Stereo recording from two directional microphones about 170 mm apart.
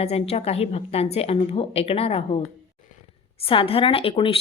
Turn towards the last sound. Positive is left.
turn(degrees=35)  # may be behind; listen again after turning